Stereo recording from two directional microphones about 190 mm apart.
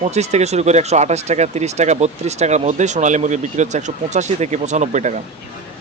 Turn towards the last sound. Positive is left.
turn(degrees=-40)  # may be behind; listen again after turning